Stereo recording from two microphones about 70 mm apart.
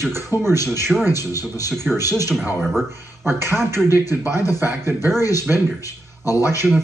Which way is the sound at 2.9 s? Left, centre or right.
Right.